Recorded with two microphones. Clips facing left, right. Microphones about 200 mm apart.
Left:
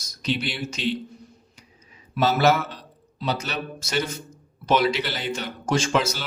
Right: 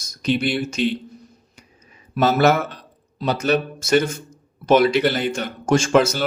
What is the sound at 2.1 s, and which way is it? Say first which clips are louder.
Speech: right 3 dB; 55° right (ahead or behind).